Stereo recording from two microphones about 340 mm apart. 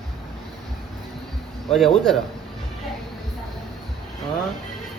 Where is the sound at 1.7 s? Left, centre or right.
Centre.